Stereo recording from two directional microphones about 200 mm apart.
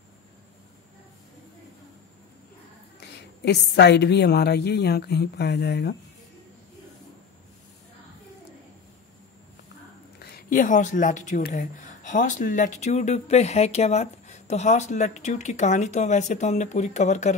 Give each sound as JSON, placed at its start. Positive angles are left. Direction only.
{"t": 3.0, "sound": "a woman's voice", "side_deg": 55}
{"t": 10.1, "sound": "speech", "side_deg": 45}